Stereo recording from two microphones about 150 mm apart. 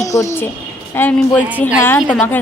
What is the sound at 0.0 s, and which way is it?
A woman's voice, 20° left (ahead or behind).